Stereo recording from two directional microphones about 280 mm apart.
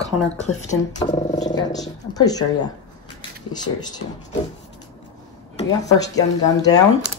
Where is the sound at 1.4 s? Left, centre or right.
Centre.